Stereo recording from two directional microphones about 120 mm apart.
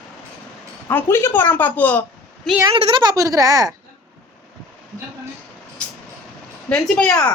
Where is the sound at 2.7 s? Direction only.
45° right (ahead or behind).